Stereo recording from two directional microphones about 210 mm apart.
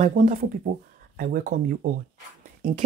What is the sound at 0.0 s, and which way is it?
Speech, 40° right (ahead or behind).